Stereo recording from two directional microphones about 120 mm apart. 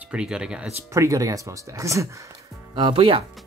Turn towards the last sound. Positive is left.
turn(degrees=-45)  # may be behind; listen again after turning